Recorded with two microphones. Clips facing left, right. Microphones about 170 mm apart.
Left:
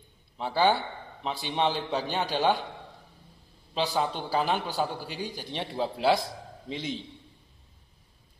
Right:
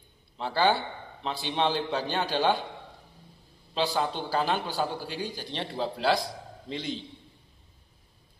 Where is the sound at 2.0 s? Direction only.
15° left (ahead or behind).